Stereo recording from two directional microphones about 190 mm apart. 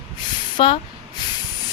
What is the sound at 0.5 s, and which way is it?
Speech, 25° left (ahead or behind).